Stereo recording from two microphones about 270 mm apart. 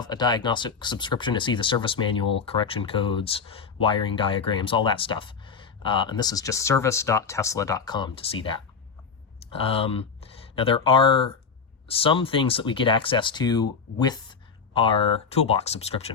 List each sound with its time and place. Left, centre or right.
0.0 s speech: centre